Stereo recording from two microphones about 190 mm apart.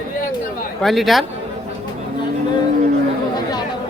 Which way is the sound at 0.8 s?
Centre (ahead or behind).